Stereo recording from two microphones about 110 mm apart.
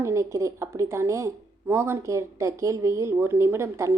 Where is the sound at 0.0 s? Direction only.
25° right (ahead or behind).